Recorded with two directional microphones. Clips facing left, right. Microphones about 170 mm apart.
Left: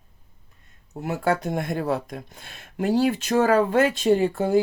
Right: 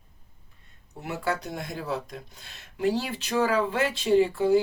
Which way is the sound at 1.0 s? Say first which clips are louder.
Left 6 dB; 45° left (ahead or behind).